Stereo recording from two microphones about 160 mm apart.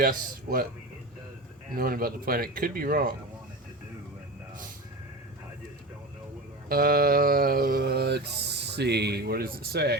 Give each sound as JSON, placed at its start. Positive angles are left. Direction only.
{"t": 0.0, "sound": "speech", "side_deg": -65}
{"t": 1.7, "sound": "speech", "side_deg": -65}
{"t": 6.7, "sound": "a sound", "side_deg": -65}
{"t": 9.7, "sound": "speech", "side_deg": -90}